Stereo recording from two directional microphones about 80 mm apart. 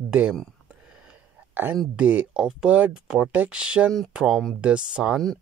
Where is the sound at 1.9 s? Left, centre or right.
Centre.